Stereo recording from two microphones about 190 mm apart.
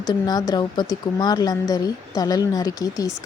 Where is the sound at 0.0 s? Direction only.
20° left (ahead or behind).